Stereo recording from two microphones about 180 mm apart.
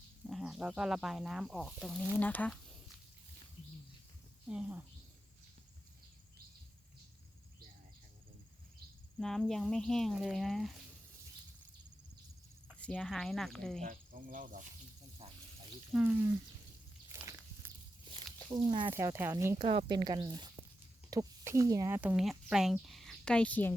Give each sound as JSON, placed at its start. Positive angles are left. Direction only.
{"t": 0.3, "sound": "speech", "side_deg": 0}
{"t": 4.4, "sound": "speech", "side_deg": -5}
{"t": 9.1, "sound": "speech", "side_deg": 0}
{"t": 12.8, "sound": "speech", "side_deg": 5}
{"t": 13.8, "sound": "cricket", "side_deg": -50}
{"t": 15.2, "sound": "cricket", "side_deg": -35}
{"t": 15.9, "sound": "speech", "side_deg": -5}
{"t": 17.1, "sound": "a sound", "side_deg": -15}
{"t": 18.5, "sound": "speech", "side_deg": -25}
{"t": 18.9, "sound": "speech", "side_deg": -15}